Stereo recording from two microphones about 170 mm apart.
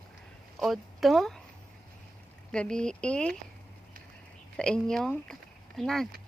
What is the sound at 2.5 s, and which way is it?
Speech, 5° left (ahead or behind).